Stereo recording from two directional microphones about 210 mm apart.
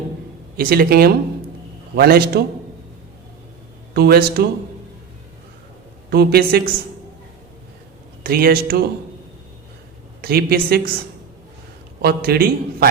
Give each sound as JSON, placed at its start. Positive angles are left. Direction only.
{"t": 0.5, "sound": "a man's voice", "side_deg": -45}
{"t": 3.9, "sound": "a man's voice", "side_deg": -45}
{"t": 6.1, "sound": "a man's voice", "side_deg": -45}
{"t": 8.2, "sound": "a man's voice", "side_deg": -45}
{"t": 10.2, "sound": "a man's voice", "side_deg": -45}
{"t": 12.0, "sound": "a man's voice", "side_deg": -45}